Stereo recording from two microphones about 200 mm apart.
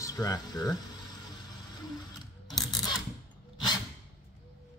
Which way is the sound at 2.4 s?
20° left (ahead or behind).